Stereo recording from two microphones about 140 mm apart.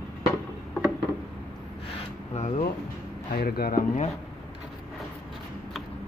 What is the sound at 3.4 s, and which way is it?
Speech, 90° left.